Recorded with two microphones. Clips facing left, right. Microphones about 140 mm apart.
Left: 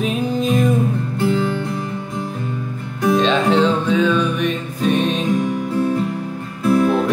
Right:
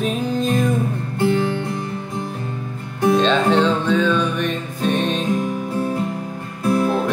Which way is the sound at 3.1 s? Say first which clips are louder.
Left 2 dB; 5° left (ahead or behind).